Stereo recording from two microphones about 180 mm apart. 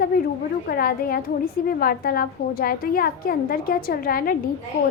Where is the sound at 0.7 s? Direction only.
55° left (ahead or behind).